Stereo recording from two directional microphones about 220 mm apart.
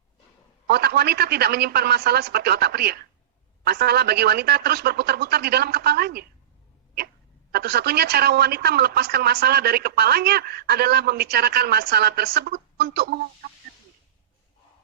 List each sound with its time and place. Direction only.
0.7 s speech: 45° right (ahead or behind)
7.5 s speech: 45° right (ahead or behind)